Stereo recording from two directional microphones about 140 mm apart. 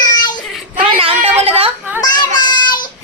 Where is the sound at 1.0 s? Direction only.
40° right (ahead or behind).